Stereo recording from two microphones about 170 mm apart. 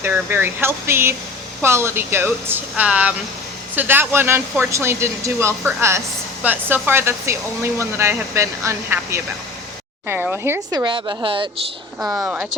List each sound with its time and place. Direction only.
0.0 s speech: 15° right (ahead or behind); by 11.4 s 30° right (ahead or behind)
11.9 s speech: 15° right (ahead or behind)